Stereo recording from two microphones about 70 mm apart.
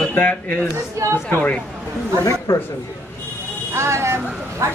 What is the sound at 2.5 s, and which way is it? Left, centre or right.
Speech, left.